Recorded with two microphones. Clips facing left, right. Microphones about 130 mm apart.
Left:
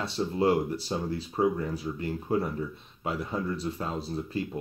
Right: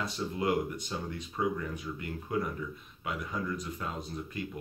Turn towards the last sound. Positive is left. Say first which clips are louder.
# left 6 dB
turn(degrees=30)  # may be behind; listen again after turning